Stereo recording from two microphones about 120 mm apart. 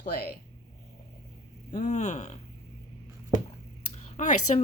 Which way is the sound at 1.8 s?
75° left (ahead or behind).